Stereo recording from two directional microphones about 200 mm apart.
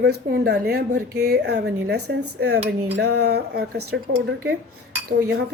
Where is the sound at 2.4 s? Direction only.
55° right (ahead or behind).